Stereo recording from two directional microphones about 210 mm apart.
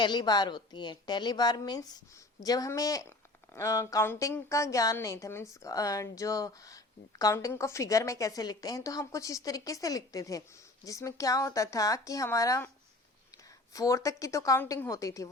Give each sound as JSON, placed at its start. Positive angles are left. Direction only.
{"t": 0.0, "sound": "a woman's voice", "side_deg": 20}
{"t": 13.7, "sound": "a woman's voice", "side_deg": 15}